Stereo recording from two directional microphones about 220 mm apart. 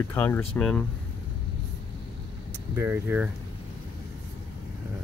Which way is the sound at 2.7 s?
10° right (ahead or behind).